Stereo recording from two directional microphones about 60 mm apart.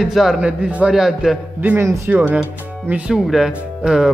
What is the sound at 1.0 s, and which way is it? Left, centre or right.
Speech, centre.